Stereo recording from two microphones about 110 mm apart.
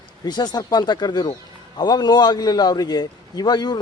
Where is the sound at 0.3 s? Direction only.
40° left (ahead or behind).